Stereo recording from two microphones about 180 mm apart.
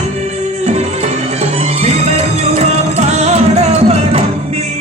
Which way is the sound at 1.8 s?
35° right (ahead or behind).